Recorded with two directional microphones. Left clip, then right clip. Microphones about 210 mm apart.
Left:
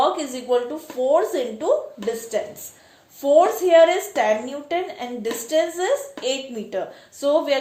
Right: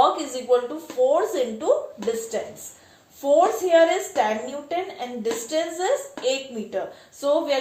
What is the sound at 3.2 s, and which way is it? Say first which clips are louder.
A woman's voice: left 3 dB; 40° left (ahead or behind).